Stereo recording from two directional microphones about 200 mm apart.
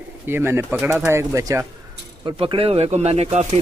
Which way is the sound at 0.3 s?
10° right (ahead or behind).